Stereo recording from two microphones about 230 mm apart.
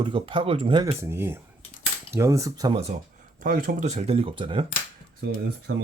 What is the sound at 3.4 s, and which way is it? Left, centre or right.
Speech, right.